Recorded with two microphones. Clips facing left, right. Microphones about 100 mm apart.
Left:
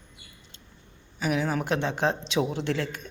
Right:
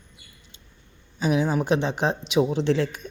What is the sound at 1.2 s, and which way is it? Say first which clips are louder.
Speech: right 4 dB; 20° right (ahead or behind).